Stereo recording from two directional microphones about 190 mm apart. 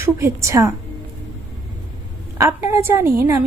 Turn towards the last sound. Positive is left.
turn(degrees=-15)  # may be behind; listen again after turning